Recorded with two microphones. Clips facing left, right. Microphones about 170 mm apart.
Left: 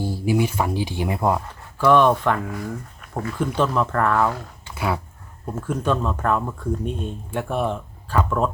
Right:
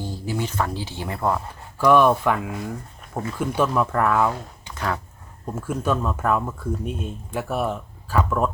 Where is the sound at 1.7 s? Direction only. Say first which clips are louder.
Even; 10° right (ahead or behind).